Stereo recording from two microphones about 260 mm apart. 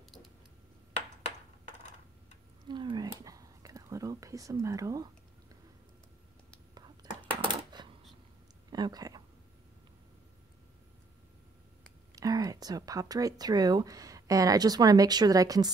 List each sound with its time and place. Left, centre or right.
2.7 s whispering: centre
6.7 s coin: centre
8.6 s a sound: centre
12.2 s speech: centre